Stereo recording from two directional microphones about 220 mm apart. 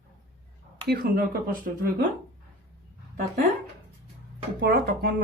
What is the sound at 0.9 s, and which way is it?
Speech, 45° right (ahead or behind).